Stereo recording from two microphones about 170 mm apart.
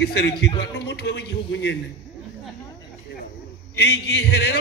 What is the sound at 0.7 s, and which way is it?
A man's voice, 85° left.